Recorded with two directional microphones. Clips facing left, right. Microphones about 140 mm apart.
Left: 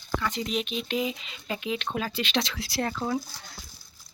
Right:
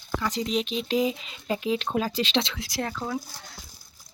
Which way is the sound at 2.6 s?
15° right (ahead or behind).